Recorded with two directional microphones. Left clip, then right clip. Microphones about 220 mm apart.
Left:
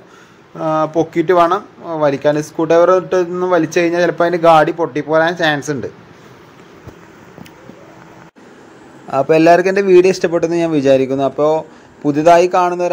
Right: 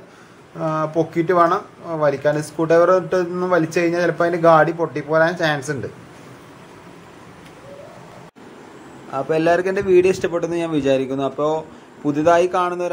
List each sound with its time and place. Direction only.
0.6 s speech: 15° left (ahead or behind)
9.1 s a man's voice: 30° left (ahead or behind)